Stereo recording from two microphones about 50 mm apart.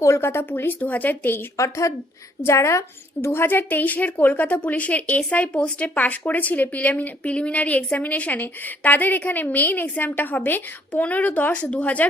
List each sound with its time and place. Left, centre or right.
0.2 s speech: left
0.8 s speech: left
1.5 s a woman's voice: left
2.5 s a woman's voice: left
3.2 s speech: left